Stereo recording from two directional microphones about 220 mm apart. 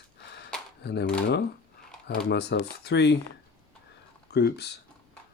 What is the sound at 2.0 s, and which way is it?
Speech, 50° left (ahead or behind).